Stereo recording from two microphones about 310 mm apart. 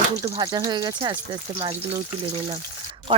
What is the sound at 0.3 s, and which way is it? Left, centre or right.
Stir, centre.